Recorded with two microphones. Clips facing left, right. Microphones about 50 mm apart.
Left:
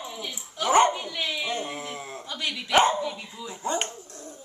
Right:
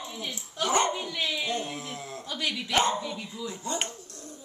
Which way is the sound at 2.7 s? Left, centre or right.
Left.